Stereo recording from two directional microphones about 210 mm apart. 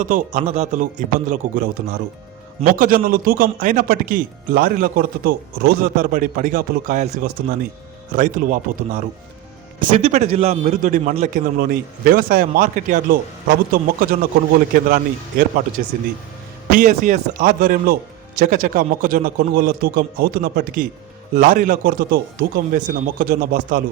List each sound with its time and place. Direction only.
0.0 s a man's voice: 35° right (ahead or behind)
11.5 s a man's voice: 45° right (ahead or behind)
14.7 s a man's voice: 45° right (ahead or behind)
16.7 s a man's voice: 40° right (ahead or behind)